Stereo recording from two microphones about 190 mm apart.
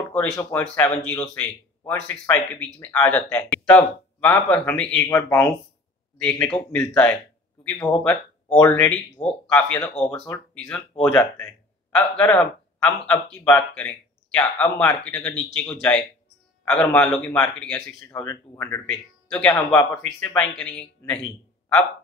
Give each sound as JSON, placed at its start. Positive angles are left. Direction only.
{"t": 0.4, "sound": "speech", "side_deg": 10}
{"t": 18.7, "sound": "speech", "side_deg": 5}